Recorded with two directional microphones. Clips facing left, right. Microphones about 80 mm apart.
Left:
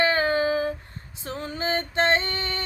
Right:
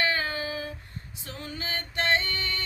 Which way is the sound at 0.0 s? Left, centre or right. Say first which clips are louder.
Left 7 dB; left.